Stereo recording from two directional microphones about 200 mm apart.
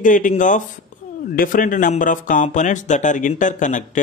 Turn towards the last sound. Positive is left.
turn(degrees=40)  # may be behind; listen again after turning